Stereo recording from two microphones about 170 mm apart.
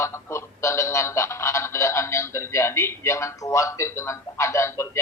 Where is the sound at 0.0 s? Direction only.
15° left (ahead or behind).